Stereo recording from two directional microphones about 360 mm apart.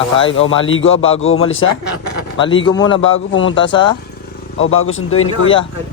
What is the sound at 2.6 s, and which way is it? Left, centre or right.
Speech, centre.